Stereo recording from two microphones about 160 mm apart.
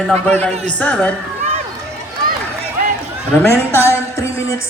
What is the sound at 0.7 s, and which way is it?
Speech, 10° left (ahead or behind).